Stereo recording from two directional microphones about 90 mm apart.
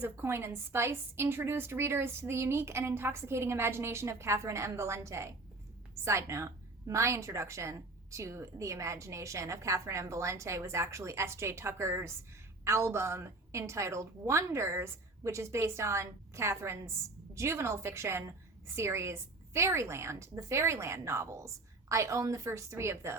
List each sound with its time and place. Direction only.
0.0 s a woman's voice: 25° right (ahead or behind)